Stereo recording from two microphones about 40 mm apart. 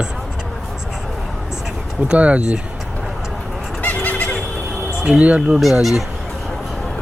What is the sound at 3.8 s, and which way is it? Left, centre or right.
Goat, left.